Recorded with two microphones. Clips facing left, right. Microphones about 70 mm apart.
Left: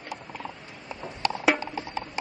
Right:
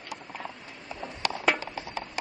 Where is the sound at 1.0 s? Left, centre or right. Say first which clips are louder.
Left 3 dB; centre.